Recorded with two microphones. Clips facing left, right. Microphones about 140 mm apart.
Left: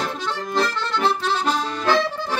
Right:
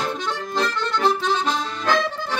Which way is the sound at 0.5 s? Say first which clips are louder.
Left 1 dB; 5° left (ahead or behind).